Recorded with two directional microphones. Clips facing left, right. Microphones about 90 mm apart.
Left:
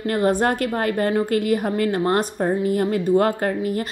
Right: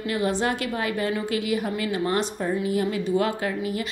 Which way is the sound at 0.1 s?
50° left (ahead or behind).